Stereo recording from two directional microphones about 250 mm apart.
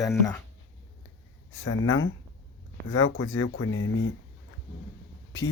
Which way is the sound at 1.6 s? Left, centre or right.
Left.